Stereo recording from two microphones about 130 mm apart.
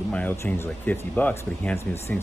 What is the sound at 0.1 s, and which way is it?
Speech, 15° left (ahead or behind).